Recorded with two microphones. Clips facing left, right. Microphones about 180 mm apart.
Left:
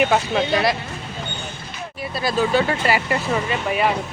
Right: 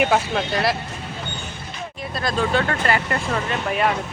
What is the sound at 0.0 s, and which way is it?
Speech, centre (ahead or behind).